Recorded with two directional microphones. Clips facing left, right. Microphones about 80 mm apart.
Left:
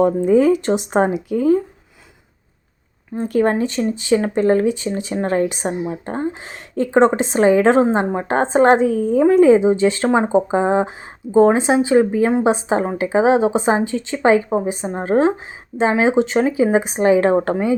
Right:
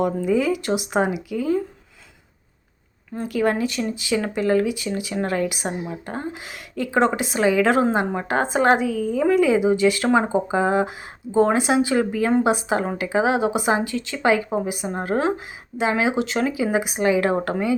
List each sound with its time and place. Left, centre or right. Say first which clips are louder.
0.0 s speech: left 7 dB; left
3.2 s speech: left 4 dB; left